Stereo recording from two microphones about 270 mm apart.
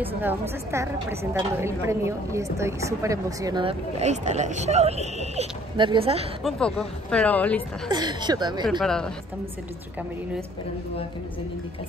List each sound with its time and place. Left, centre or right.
0.0 s a woman's voice: centre
6.4 s speech: centre
7.9 s a woman's voice: centre
8.6 s speech: centre